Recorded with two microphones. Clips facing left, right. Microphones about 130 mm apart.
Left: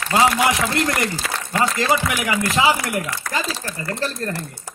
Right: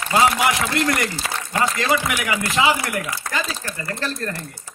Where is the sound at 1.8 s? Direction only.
30° left (ahead or behind).